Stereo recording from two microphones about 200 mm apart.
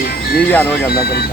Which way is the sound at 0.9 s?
50° left (ahead or behind).